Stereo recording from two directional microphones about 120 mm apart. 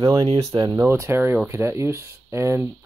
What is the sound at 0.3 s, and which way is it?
Speech, 60° right (ahead or behind).